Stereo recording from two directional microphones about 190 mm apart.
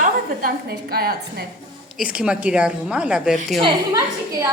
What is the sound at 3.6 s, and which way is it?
Speech, 25° right (ahead or behind).